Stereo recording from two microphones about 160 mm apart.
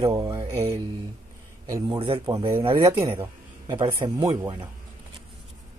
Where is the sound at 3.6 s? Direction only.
25° right (ahead or behind).